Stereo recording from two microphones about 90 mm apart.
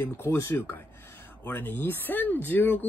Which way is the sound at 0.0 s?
25° left (ahead or behind).